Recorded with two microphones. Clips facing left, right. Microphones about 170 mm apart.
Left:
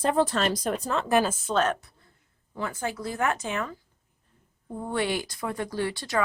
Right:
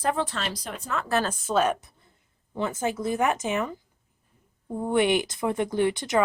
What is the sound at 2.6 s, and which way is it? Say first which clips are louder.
Speech: right 4 dB; 20° right (ahead or behind).